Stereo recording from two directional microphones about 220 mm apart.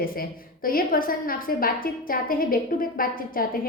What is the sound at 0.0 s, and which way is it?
A woman's voice, 40° left (ahead or behind).